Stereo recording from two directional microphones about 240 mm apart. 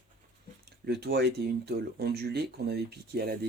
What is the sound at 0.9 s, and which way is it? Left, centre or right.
Speech, right.